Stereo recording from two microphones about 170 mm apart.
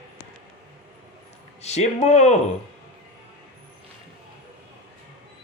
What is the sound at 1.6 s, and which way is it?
Speech, 40° left (ahead or behind).